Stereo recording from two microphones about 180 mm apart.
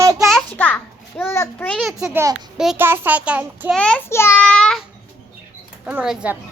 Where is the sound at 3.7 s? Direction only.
5° left (ahead or behind).